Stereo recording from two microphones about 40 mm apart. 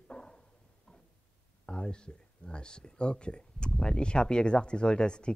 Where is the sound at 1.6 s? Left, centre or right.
Left.